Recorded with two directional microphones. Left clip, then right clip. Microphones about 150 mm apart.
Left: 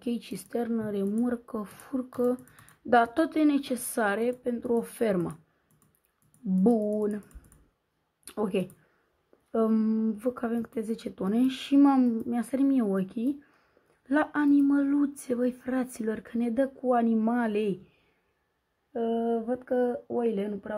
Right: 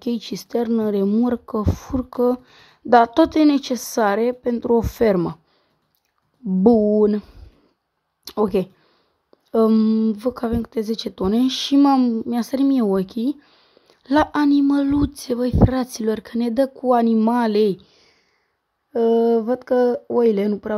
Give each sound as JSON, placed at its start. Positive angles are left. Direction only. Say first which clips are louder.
{"t": 0.0, "sound": "speech", "louder": "right 8 dB", "side_deg": -45}
{"t": 6.6, "sound": "speech", "louder": "right 11 dB", "side_deg": -45}
{"t": 8.3, "sound": "speech", "louder": "right 10 dB", "side_deg": -40}
{"t": 9.8, "sound": "a woman's voice", "louder": "right 9 dB", "side_deg": -25}
{"t": 11.8, "sound": "a woman's voice", "louder": "right 6 dB", "side_deg": -25}
{"t": 18.9, "sound": "speech", "louder": "right 12 dB", "side_deg": -60}